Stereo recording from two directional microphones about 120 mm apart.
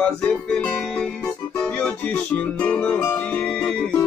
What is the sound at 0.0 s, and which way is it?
Music, 10° left (ahead or behind).